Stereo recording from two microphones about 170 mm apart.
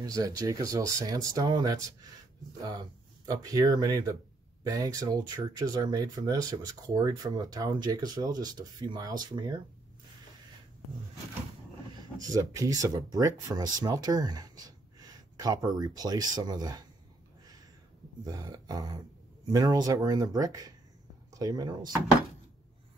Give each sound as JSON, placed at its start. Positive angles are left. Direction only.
{"t": 0.0, "sound": "speech", "side_deg": -20}
{"t": 3.3, "sound": "speech", "side_deg": -20}
{"t": 11.9, "sound": "speech", "side_deg": -20}
{"t": 18.2, "sound": "speech", "side_deg": -20}